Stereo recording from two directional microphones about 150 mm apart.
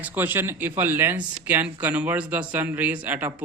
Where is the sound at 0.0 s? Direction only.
10° right (ahead or behind).